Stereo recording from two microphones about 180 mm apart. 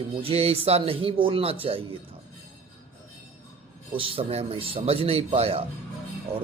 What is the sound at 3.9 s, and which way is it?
Speech, 30° right (ahead or behind).